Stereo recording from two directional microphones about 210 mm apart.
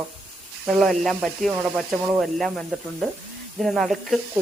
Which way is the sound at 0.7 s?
Centre (ahead or behind).